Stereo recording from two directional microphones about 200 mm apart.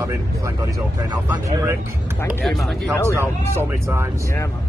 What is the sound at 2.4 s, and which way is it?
Speech, centre (ahead or behind).